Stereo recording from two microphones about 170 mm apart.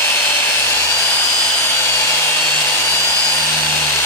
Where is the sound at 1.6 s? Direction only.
15° left (ahead or behind).